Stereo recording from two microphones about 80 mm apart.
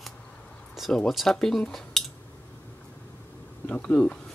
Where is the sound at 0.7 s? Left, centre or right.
Centre.